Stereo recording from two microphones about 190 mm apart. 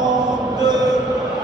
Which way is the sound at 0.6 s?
20° right (ahead or behind).